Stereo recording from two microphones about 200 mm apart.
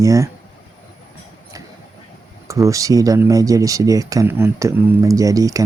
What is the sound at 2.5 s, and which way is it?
Speech, 15° right (ahead or behind).